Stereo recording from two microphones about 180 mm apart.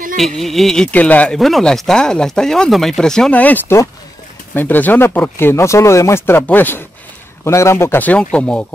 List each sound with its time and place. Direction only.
0.2 s speech: centre (ahead or behind)